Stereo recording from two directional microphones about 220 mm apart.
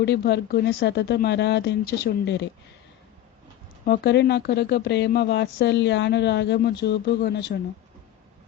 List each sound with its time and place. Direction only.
0.0 s speech: 50° left (ahead or behind)
3.8 s speech: 45° left (ahead or behind)